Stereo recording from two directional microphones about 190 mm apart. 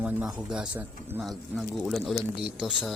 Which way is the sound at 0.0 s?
5° right (ahead or behind).